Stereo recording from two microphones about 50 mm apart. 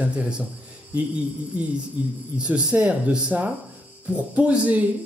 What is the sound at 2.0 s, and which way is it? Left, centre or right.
Speech, right.